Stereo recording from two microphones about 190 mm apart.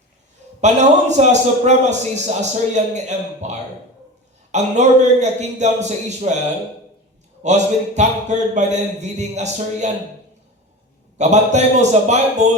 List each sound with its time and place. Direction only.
0.6 s a man's voice: 35° right (ahead or behind)
7.4 s a man's voice: 35° right (ahead or behind)
11.2 s a man's voice: 35° right (ahead or behind)